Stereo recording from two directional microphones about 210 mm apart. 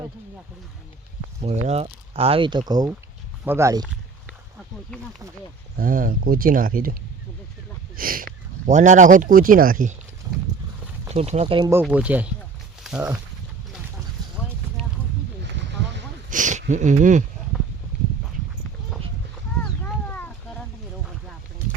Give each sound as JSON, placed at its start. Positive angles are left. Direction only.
{"t": 1.4, "sound": "speech", "side_deg": -30}
{"t": 5.7, "sound": "speech", "side_deg": -40}
{"t": 7.9, "sound": "speech", "side_deg": -40}
{"t": 11.1, "sound": "speech", "side_deg": -30}
{"t": 11.7, "sound": "speech", "side_deg": -10}
{"t": 16.3, "sound": "speech", "side_deg": -35}
{"t": 19.6, "sound": "a sound", "side_deg": 5}